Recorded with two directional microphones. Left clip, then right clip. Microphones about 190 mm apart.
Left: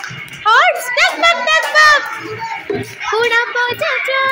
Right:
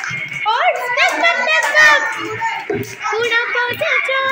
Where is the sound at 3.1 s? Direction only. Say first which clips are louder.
Left 3 dB; 25° left (ahead or behind).